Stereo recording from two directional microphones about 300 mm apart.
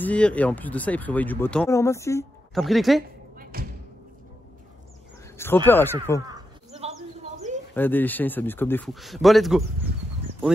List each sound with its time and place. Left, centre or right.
0.0 s speech: centre
3.5 s thump: right
5.7 s speech: centre
6.2 s bird: centre
7.7 s speech: centre